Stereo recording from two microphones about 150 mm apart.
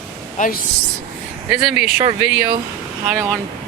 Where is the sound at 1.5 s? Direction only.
5° right (ahead or behind).